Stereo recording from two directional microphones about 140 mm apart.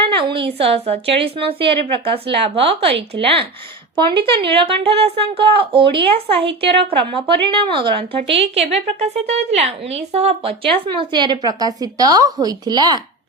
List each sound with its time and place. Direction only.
0.0 s speech: 40° right (ahead or behind)